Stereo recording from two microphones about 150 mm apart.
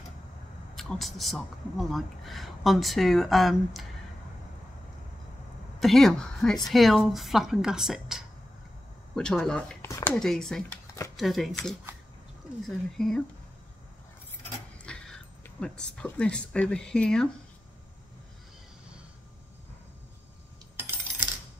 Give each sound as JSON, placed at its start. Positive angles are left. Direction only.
{"t": 0.7, "sound": "speech", "side_deg": 0}
{"t": 5.8, "sound": "speech", "side_deg": 0}
{"t": 9.8, "sound": "speech", "side_deg": 20}
{"t": 10.1, "sound": "speech", "side_deg": 5}
{"t": 14.9, "sound": "a sound", "side_deg": 5}
{"t": 15.6, "sound": "speech", "side_deg": 5}